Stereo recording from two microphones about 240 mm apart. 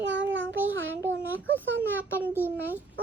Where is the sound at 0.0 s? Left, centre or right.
Right.